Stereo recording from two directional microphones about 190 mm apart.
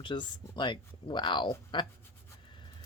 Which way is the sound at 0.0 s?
25° left (ahead or behind).